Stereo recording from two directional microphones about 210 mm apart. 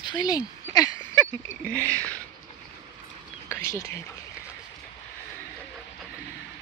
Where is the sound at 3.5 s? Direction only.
15° left (ahead or behind).